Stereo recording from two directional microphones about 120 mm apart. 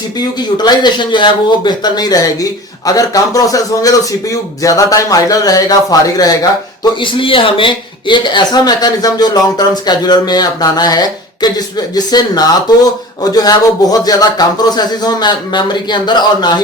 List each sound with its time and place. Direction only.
0.2 s speech: 35° left (ahead or behind)
7.0 s speech: 45° left (ahead or behind)